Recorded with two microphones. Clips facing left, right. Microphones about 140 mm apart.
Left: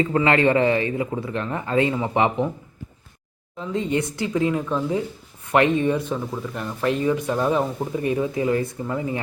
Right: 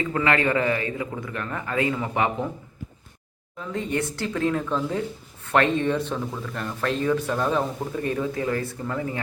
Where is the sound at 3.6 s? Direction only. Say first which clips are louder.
Left 3 dB; 20° left (ahead or behind).